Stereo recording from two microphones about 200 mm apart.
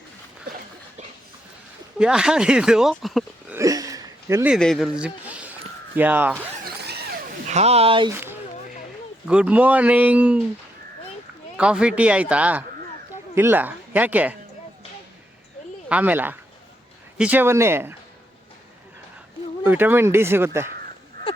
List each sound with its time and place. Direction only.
2.0 s speech: 5° right (ahead or behind)
3.5 s a sound: 15° right (ahead or behind)
4.5 s a man's voice: centre (ahead or behind)
7.4 s speech: 35° right (ahead or behind)
8.1 s speech: 10° right (ahead or behind)
11.5 s speech: 5° right (ahead or behind)
15.9 s speech: 5° right (ahead or behind)
19.6 s speech: 10° right (ahead or behind)